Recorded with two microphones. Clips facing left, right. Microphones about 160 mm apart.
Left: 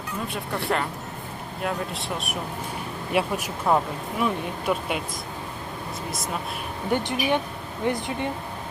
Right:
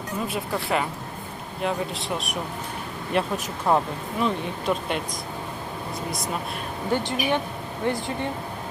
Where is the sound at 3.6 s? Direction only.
Centre (ahead or behind).